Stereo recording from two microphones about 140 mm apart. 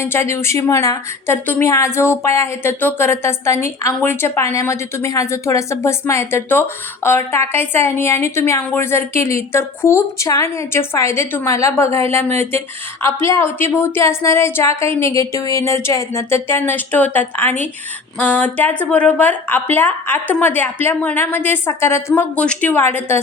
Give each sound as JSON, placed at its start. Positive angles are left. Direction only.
{"t": 0.0, "sound": "a woman's voice", "side_deg": 20}